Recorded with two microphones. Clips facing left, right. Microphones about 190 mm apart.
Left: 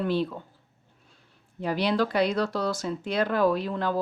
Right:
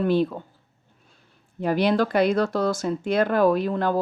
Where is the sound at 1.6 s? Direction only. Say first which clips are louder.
Right 4 dB; 50° right (ahead or behind).